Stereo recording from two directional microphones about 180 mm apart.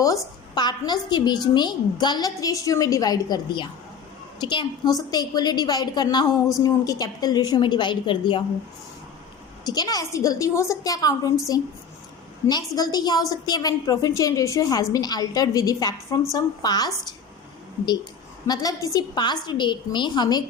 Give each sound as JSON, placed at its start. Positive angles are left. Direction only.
{"t": 0.5, "sound": "a woman's voice", "side_deg": 25}
{"t": 9.6, "sound": "a woman's voice", "side_deg": 20}
{"t": 18.4, "sound": "a woman's voice", "side_deg": 20}